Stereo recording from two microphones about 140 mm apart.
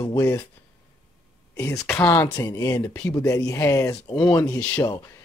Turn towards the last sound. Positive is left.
turn(degrees=10)  # may be behind; listen again after turning